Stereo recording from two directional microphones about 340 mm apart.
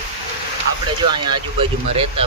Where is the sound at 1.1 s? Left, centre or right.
Centre.